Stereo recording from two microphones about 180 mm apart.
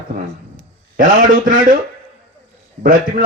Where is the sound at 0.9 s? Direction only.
50° right (ahead or behind).